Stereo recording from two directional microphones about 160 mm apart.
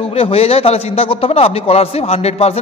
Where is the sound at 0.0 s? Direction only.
40° left (ahead or behind).